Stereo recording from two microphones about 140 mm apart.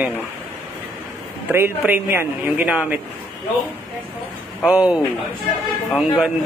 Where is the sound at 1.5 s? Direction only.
15° right (ahead or behind).